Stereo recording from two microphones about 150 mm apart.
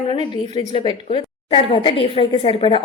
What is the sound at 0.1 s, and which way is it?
A woman's voice, 35° left (ahead or behind).